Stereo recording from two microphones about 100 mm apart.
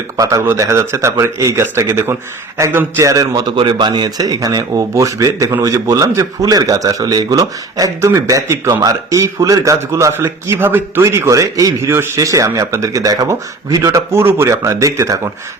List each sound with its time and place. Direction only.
0.2 s a man's voice: 35° right (ahead or behind)
3.5 s a man's voice: 55° right (ahead or behind); by 15.2 s 30° right (ahead or behind)